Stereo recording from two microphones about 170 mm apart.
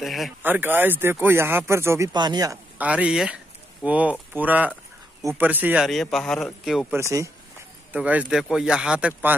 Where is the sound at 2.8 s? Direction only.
5° right (ahead or behind).